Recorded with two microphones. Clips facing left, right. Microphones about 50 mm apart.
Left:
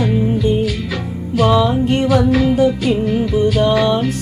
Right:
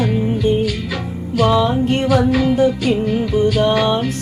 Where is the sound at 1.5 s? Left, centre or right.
Centre.